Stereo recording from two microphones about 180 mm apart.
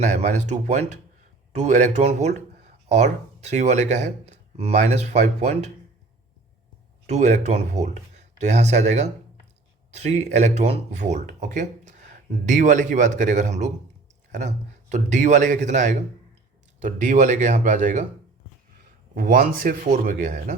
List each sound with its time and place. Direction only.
0.0 s speech: 40° right (ahead or behind)
7.1 s speech: 40° right (ahead or behind)
19.1 s speech: 50° right (ahead or behind)